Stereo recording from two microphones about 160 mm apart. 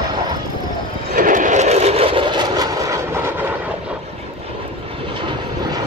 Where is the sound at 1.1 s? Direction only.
55° right (ahead or behind); by 3.7 s 10° right (ahead or behind).